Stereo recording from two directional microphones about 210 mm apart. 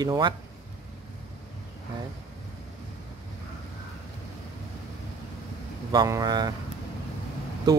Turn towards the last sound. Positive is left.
turn(degrees=-20)  # may be behind; listen again after turning